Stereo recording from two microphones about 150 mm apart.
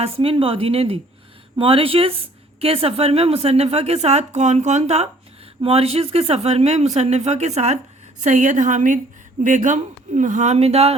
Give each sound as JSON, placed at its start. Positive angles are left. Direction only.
{"t": 0.0, "sound": "a woman's voice", "side_deg": -40}